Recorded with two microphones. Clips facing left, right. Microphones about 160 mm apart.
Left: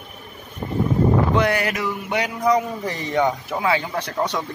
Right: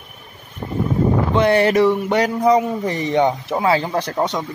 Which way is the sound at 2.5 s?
20° right (ahead or behind).